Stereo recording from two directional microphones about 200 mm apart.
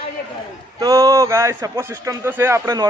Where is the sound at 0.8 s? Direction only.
15° right (ahead or behind).